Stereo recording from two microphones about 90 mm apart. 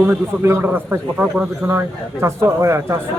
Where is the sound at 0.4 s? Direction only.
25° right (ahead or behind).